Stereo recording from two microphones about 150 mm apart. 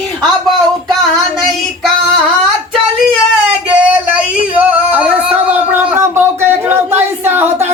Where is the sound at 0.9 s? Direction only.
Centre (ahead or behind).